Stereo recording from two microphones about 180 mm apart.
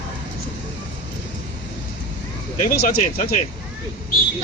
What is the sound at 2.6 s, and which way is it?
Speech, 55° left (ahead or behind).